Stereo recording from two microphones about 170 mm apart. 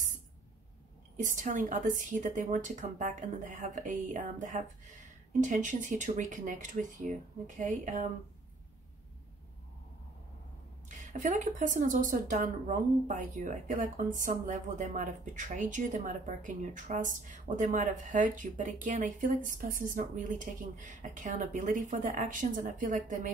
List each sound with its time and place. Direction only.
1.1 s a woman's voice: 45° right (ahead or behind)
10.9 s a woman's voice: 45° right (ahead or behind)